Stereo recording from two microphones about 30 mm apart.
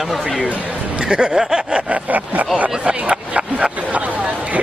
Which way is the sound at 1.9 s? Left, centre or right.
Right.